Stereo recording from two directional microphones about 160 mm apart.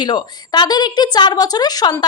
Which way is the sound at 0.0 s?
30° left (ahead or behind).